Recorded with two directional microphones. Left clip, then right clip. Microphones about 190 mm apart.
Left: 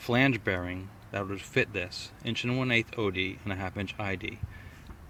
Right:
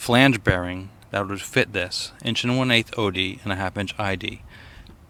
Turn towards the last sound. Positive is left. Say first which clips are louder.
# right 8 dB
turn(degrees=-25)  # may be behind; listen again after turning